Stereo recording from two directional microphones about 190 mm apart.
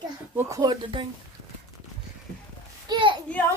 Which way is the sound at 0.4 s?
15° right (ahead or behind).